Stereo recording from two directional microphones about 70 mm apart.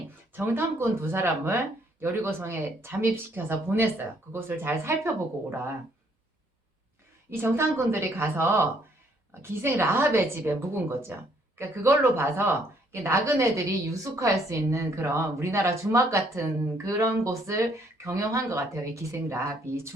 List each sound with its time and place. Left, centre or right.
0.3 s speech: right
7.3 s speech: right